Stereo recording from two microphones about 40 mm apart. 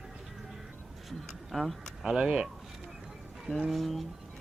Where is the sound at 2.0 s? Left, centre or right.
Centre.